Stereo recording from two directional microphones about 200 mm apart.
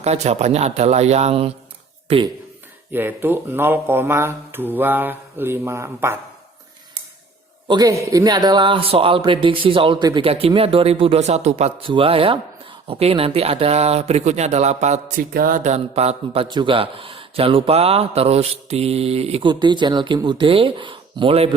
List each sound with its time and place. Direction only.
0.0 s speech: 35° right (ahead or behind)
2.9 s speech: 10° right (ahead or behind)
7.7 s a man's voice: 15° right (ahead or behind); by 15.0 s 35° right (ahead or behind)
15.1 s a man's voice: 45° right (ahead or behind); by 21.5 s 30° right (ahead or behind)